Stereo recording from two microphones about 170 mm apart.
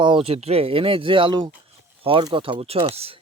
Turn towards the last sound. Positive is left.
turn(degrees=-35)  # may be behind; listen again after turning